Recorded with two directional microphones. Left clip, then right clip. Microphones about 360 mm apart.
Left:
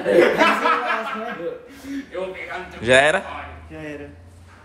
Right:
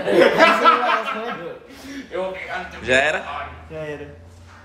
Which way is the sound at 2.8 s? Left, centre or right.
Centre.